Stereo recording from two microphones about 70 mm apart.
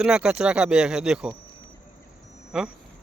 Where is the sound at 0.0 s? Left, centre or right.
Centre.